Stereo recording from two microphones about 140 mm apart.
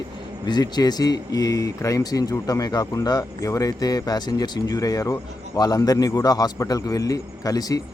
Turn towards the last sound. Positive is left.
turn(degrees=25)  # may be behind; listen again after turning